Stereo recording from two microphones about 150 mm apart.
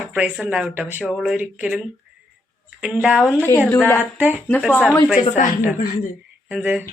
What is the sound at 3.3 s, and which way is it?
Speech, 15° left (ahead or behind).